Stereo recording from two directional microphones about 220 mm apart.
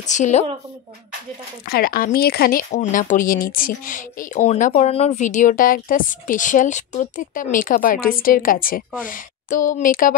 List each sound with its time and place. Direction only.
0.0 s speech: 35° left (ahead or behind)
1.7 s speech: 40° left (ahead or behind)